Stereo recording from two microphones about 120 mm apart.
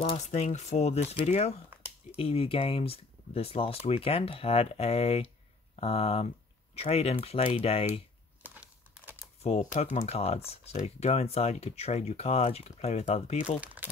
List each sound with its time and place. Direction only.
0.2 s speech: 70° left (ahead or behind)
1.7 s a sound: 15° right (ahead or behind)
2.1 s speech: 50° left (ahead or behind)
8.4 s typewriter: 15° right (ahead or behind)
9.4 s speech: 70° left (ahead or behind)
9.9 s speech: 60° left (ahead or behind)